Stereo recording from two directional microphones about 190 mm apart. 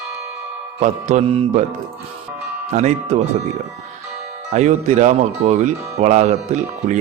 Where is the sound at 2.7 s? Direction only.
35° right (ahead or behind).